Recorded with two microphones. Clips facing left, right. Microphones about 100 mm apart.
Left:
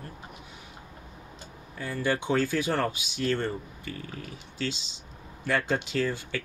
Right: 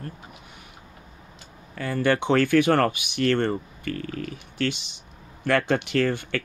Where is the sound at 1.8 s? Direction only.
70° right (ahead or behind).